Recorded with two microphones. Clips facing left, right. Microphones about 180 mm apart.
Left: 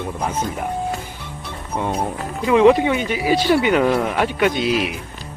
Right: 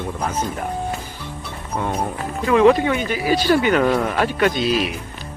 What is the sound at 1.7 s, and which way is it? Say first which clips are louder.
Speech: left 1 dB; 20° left (ahead or behind).